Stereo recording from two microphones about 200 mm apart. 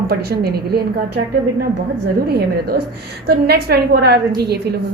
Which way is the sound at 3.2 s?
55° right (ahead or behind).